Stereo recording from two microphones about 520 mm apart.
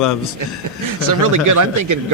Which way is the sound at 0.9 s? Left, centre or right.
Right.